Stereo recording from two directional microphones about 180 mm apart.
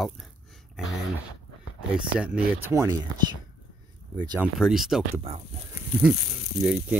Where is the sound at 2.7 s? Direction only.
20° right (ahead or behind).